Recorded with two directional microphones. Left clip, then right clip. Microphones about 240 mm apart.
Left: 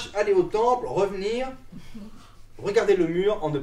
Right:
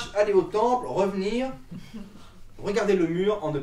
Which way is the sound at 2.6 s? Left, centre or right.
Centre.